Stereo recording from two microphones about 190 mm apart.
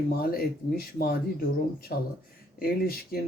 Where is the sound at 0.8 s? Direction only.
50° left (ahead or behind).